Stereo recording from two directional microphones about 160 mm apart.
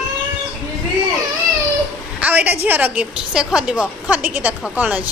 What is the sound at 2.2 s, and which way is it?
A woman's voice, 10° right (ahead or behind).